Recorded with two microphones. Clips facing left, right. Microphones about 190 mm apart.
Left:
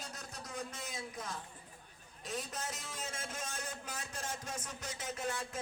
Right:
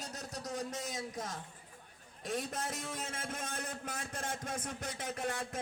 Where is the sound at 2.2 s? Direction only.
55° right (ahead or behind).